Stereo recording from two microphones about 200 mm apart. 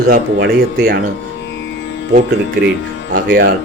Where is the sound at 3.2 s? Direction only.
45° right (ahead or behind).